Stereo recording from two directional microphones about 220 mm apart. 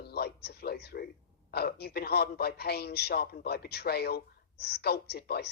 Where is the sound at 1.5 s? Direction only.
45° left (ahead or behind).